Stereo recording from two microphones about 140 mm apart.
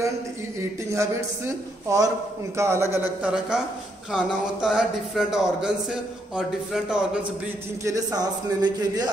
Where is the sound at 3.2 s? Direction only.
5° right (ahead or behind).